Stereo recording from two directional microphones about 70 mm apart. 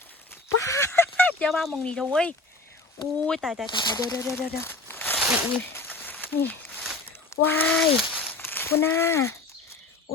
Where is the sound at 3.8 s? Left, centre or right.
Left.